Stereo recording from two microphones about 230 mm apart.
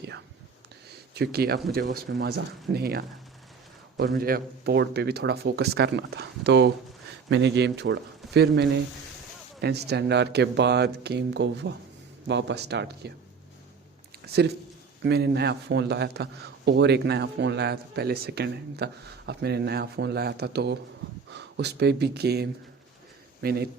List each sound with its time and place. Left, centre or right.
0.9 s a sound: right
1.7 s a man's voice: right
15.0 s a man's voice: right